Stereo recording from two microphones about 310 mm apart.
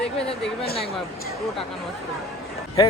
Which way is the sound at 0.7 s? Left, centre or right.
Left.